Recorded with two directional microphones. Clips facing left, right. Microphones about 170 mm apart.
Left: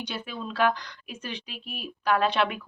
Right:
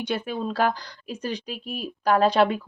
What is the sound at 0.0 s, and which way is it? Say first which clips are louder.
Speech: right 7 dB; 50° right (ahead or behind).